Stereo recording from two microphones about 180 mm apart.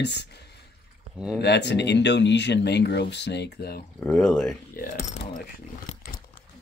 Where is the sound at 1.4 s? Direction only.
70° left (ahead or behind).